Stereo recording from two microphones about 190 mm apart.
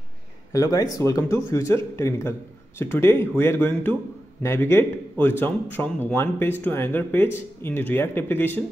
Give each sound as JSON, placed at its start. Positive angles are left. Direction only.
{"t": 0.5, "sound": "a man's voice", "side_deg": 20}